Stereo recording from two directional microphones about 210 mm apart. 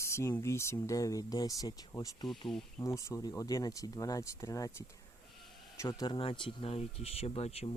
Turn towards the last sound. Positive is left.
turn(degrees=30)  # may be behind; listen again after turning